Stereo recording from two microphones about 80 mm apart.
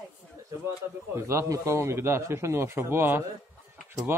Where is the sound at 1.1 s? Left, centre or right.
Right.